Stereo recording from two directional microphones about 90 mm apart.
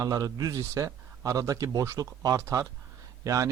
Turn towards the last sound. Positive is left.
turn(degrees=-35)  # may be behind; listen again after turning